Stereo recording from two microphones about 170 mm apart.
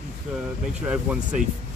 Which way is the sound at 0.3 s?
5° right (ahead or behind).